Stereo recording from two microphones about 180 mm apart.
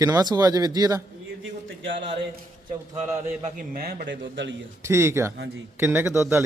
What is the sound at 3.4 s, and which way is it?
A man's voice, 55° right (ahead or behind).